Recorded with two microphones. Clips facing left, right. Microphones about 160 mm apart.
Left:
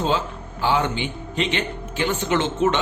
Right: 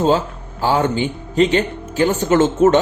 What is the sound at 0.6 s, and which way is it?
A man's voice, 40° right (ahead or behind).